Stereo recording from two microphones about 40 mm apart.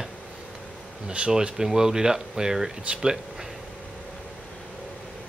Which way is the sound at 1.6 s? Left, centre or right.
Centre.